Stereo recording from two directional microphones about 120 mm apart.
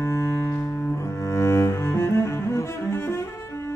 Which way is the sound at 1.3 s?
20° left (ahead or behind).